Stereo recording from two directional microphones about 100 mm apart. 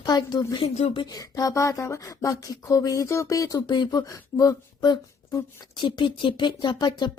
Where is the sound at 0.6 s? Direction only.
90° left.